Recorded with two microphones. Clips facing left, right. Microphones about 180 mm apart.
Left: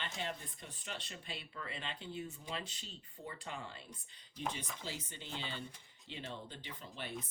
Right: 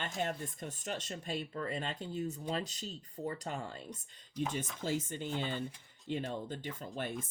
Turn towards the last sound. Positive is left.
turn(degrees=-45)  # may be behind; listen again after turning